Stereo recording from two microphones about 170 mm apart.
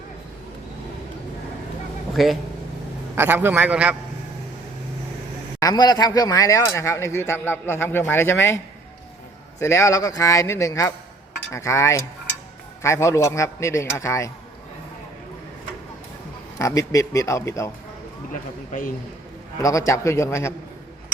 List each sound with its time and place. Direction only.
2.1 s speech: centre (ahead or behind)
3.2 s a man's voice: 10° right (ahead or behind)
5.5 s a man's voice: 20° left (ahead or behind)
9.6 s a man's voice: 15° left (ahead or behind)
16.6 s a man's voice: 20° left (ahead or behind)
18.7 s a man's voice: 55° left (ahead or behind)
19.6 s a man's voice: 15° left (ahead or behind)